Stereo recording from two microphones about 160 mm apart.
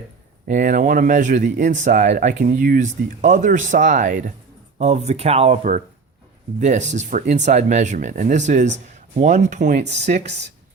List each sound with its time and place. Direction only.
0.4 s speech: 55° right (ahead or behind)